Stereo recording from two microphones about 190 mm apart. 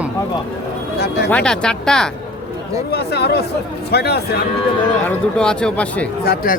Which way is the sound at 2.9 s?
60° left (ahead or behind).